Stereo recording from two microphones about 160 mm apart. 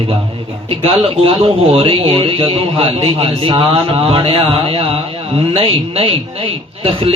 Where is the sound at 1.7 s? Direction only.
35° right (ahead or behind).